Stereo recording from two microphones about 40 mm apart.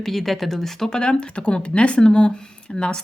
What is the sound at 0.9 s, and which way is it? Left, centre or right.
Speech, left.